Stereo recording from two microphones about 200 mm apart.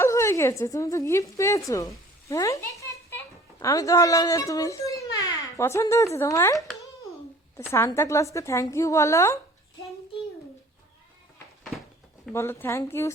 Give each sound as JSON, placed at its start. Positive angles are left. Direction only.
{"t": 0.0, "sound": "a woman's voice", "side_deg": 15}
{"t": 7.7, "sound": "a woman's voice", "side_deg": 15}
{"t": 12.3, "sound": "a woman's voice", "side_deg": 10}